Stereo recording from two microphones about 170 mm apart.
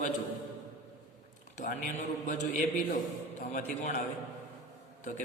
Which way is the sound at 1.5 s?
45° left (ahead or behind).